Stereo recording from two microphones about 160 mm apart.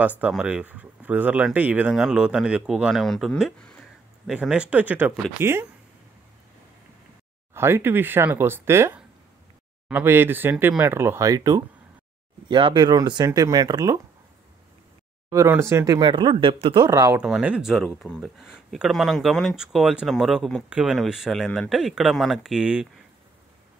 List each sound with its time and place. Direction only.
0.3 s speech: 5° right (ahead or behind)
7.5 s speech: 15° right (ahead or behind)
15.2 s speech: 15° right (ahead or behind); by 16.8 s 35° right (ahead or behind)
16.8 s speech: 25° right (ahead or behind)
17.2 s speech: 5° right (ahead or behind)